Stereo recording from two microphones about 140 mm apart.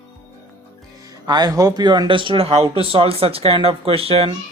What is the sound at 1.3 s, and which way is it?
Speech, 30° right (ahead or behind).